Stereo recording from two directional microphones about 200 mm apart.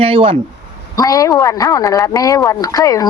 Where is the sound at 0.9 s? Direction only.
15° left (ahead or behind).